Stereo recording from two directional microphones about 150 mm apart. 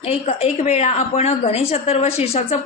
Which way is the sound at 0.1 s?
45° left (ahead or behind).